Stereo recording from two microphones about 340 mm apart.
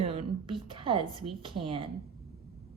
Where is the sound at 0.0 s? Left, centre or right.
Centre.